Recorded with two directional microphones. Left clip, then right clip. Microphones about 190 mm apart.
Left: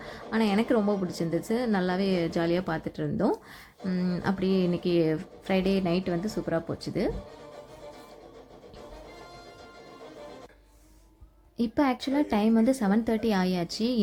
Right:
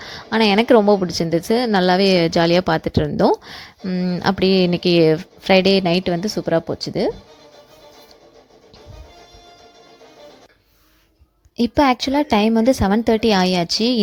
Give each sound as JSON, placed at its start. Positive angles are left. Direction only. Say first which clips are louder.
{"t": 0.0, "sound": "a woman's voice", "louder": "right 11 dB", "side_deg": -35}
{"t": 4.2, "sound": "a woman's voice", "louder": "right 12 dB", "side_deg": -40}
{"t": 11.5, "sound": "a woman's voice", "louder": "right 11 dB", "side_deg": -35}